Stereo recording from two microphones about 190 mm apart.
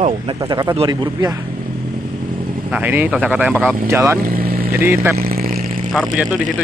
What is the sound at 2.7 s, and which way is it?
Speech, 10° right (ahead or behind).